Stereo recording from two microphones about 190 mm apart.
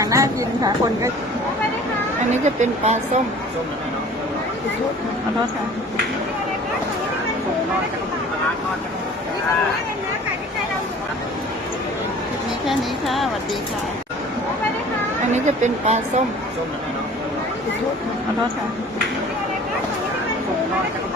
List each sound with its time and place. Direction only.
0.0 s a woman's voice: 15° right (ahead or behind)
2.3 s speech: 40° right (ahead or behind)
12.6 s speech: centre (ahead or behind)
15.3 s speech: 40° right (ahead or behind)